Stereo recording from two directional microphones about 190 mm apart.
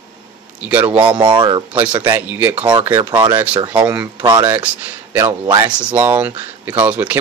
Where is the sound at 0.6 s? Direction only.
5° right (ahead or behind).